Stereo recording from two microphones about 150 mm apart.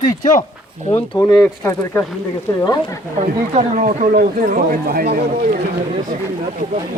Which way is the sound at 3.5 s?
55° right (ahead or behind).